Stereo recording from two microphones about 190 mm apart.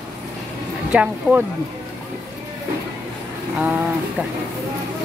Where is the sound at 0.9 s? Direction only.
10° right (ahead or behind).